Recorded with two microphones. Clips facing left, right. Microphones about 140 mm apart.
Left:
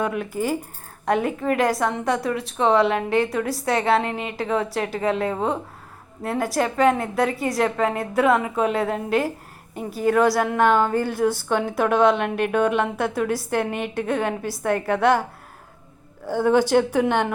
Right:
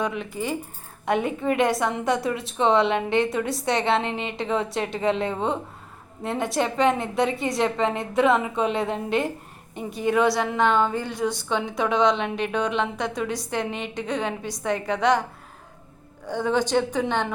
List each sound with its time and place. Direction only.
1.0 s a woman's voice: centre (ahead or behind)
13.7 s a woman's voice: 55° left (ahead or behind)
14.1 s a woman's voice: 5° left (ahead or behind)
16.2 s a woman's voice: 10° left (ahead or behind)